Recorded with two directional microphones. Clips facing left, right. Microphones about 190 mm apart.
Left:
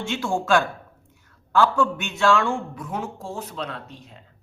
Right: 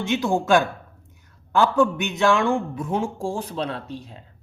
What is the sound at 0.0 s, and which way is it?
A man's voice, 20° right (ahead or behind).